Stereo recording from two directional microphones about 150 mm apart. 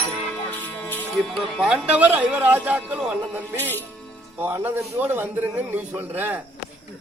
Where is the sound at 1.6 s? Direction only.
5° right (ahead or behind).